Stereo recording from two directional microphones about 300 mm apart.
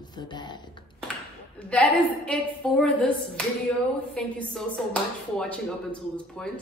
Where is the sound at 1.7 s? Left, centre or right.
Centre.